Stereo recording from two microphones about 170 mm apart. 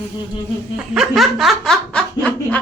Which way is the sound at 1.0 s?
Centre (ahead or behind).